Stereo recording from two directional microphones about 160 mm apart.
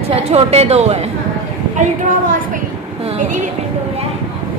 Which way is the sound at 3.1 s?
50° right (ahead or behind).